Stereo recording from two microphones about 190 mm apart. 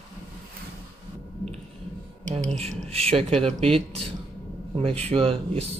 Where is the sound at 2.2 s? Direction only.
40° right (ahead or behind).